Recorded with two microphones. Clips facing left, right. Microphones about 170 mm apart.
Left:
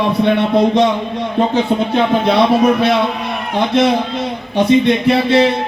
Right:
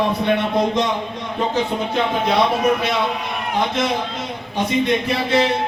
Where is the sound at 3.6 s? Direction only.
70° left (ahead or behind).